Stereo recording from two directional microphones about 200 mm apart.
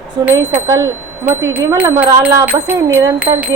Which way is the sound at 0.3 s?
10° right (ahead or behind).